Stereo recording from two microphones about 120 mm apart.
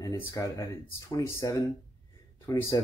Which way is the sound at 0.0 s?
30° left (ahead or behind).